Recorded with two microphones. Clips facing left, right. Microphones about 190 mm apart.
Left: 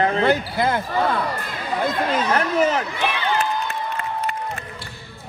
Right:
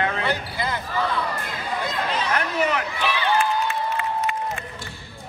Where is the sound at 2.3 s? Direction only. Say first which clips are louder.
Left 4 dB; 35° left (ahead or behind).